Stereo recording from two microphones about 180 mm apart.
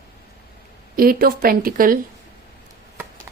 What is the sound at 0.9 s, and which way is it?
A woman's voice, 55° right (ahead or behind).